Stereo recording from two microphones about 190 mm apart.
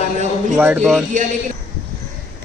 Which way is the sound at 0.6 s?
5° right (ahead or behind).